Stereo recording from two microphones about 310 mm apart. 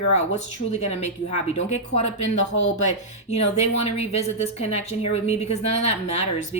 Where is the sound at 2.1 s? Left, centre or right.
Left.